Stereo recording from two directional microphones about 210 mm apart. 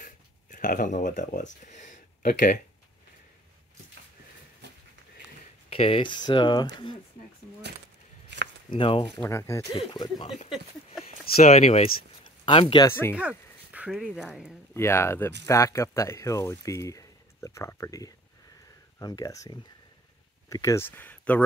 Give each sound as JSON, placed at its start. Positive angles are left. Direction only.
{"t": 0.0, "sound": "a sound", "side_deg": 40}
{"t": 1.6, "sound": "speech", "side_deg": 35}
{"t": 5.7, "sound": "speech", "side_deg": 25}
{"t": 8.3, "sound": "a sound", "side_deg": -55}
{"t": 8.6, "sound": "speech", "side_deg": 25}
{"t": 9.2, "sound": "speech", "side_deg": 15}
{"t": 9.8, "sound": "speech", "side_deg": 25}
{"t": 11.4, "sound": "speech", "side_deg": 30}
{"t": 13.1, "sound": "speech", "side_deg": -5}
{"t": 14.7, "sound": "speech", "side_deg": 10}